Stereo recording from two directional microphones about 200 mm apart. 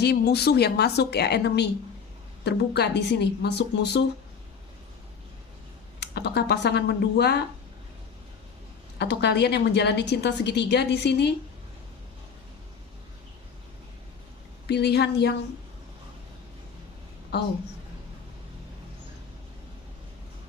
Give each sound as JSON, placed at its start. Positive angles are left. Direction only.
{"t": 0.0, "sound": "a woman's voice", "side_deg": 55}
{"t": 6.0, "sound": "a woman's voice", "side_deg": 55}
{"t": 9.0, "sound": "a woman's voice", "side_deg": 55}
{"t": 14.7, "sound": "a woman's voice", "side_deg": 55}